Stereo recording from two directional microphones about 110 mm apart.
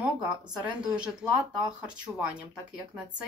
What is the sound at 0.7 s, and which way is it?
Speech, 10° right (ahead or behind).